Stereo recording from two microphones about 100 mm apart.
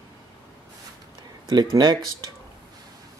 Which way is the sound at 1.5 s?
45° right (ahead or behind).